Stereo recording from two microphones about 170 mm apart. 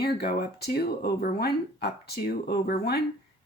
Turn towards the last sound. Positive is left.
turn(degrees=70)  # may be behind; listen again after turning